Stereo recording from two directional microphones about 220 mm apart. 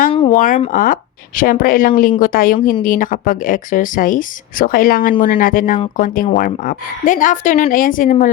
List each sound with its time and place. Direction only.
0.3 s speech: 35° left (ahead or behind)